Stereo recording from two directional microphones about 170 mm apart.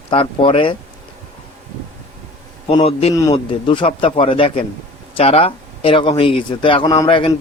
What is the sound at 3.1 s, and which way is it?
Speech, 20° left (ahead or behind).